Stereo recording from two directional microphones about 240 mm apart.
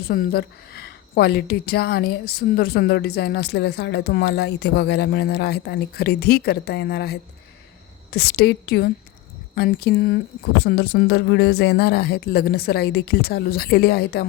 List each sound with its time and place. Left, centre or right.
0.0 s a woman's voice: left